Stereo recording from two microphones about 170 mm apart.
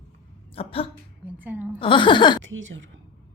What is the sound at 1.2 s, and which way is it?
Speech, 10° right (ahead or behind).